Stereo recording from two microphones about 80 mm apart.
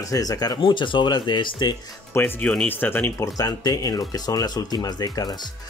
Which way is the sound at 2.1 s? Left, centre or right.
Left.